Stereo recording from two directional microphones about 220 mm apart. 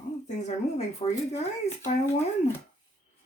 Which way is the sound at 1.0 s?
25° left (ahead or behind).